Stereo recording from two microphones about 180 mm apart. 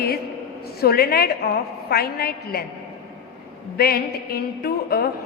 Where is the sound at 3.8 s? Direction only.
60° left (ahead or behind).